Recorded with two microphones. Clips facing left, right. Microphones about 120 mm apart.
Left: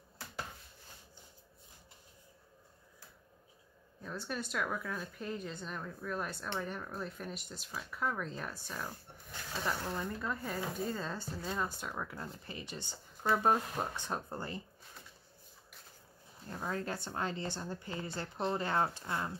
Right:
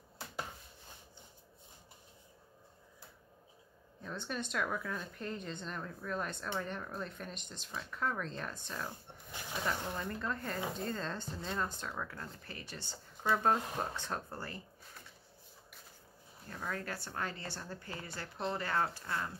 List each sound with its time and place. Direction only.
4.0 s speech: 5° left (ahead or behind)
9.3 s a sound: 15° right (ahead or behind)
9.9 s speech: 10° left (ahead or behind)
16.4 s a woman's voice: 25° left (ahead or behind)